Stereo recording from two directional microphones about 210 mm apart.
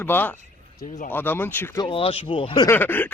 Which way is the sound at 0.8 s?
35° left (ahead or behind).